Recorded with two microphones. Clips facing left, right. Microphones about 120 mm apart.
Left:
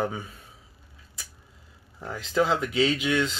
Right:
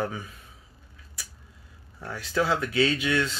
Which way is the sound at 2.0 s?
20° left (ahead or behind).